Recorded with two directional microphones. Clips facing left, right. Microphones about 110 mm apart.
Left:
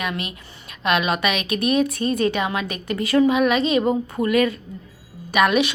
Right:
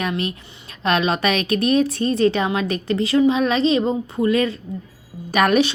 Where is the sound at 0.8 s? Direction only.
35° right (ahead or behind).